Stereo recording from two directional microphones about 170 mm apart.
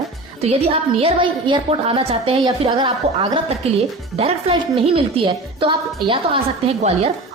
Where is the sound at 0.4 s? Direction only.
35° right (ahead or behind).